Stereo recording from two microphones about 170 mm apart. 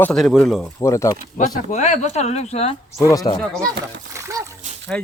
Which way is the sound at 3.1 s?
25° left (ahead or behind).